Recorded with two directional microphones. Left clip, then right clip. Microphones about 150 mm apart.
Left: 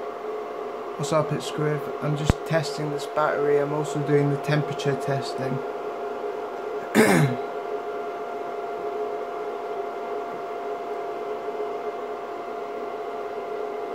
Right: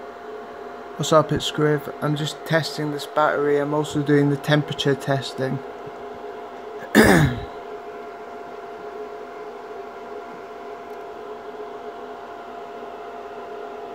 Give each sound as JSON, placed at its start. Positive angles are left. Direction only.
{"t": 1.0, "sound": "speech", "side_deg": -30}
{"t": 6.9, "sound": "throat clearing", "side_deg": -30}